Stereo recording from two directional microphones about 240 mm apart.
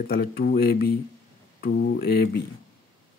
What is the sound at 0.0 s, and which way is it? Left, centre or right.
Speech, left.